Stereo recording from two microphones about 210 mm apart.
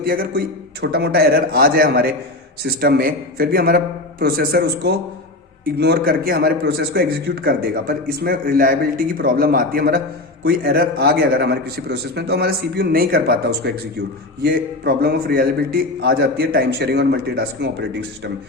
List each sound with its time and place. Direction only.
0.0 s a man's voice: 45° right (ahead or behind)